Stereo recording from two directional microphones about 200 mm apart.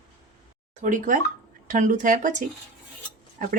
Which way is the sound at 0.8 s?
40° right (ahead or behind).